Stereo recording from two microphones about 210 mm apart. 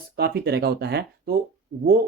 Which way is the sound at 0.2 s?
50° right (ahead or behind).